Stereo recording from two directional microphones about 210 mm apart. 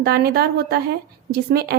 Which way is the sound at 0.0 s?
50° right (ahead or behind).